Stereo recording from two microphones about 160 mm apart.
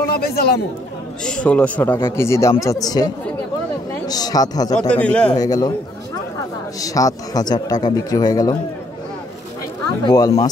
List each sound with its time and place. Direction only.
0.0 s speech: 75° left (ahead or behind)
1.2 s a man's voice: 5° left (ahead or behind); by 3.1 s 25° left (ahead or behind)
4.1 s speech: 25° left (ahead or behind)
4.7 s a man's voice: 5° left (ahead or behind)
5.3 s speech: 25° left (ahead or behind)
6.8 s speech: 20° left (ahead or behind)
10.0 s speech: 25° left (ahead or behind)